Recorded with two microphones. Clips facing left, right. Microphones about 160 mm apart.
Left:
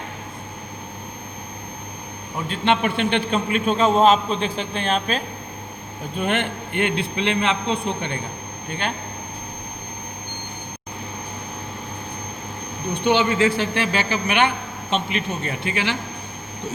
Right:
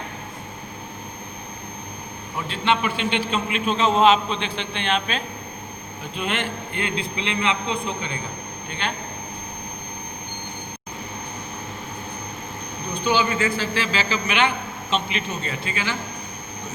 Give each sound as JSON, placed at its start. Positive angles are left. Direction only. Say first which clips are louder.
{"t": 2.5, "sound": "a man's voice", "louder": "left 2 dB", "side_deg": 50}
{"t": 6.1, "sound": "a man's voice", "louder": "left 4 dB", "side_deg": 55}
{"t": 13.1, "sound": "a man's voice", "louder": "left 3 dB", "side_deg": 65}